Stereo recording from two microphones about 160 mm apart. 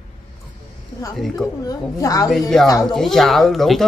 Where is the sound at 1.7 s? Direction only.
20° left (ahead or behind).